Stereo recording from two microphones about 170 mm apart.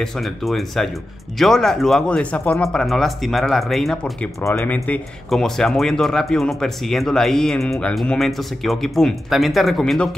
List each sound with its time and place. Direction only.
0.0 s speech: centre (ahead or behind)
4.4 s speech: 15° left (ahead or behind)
4.7 s speech: 5° left (ahead or behind)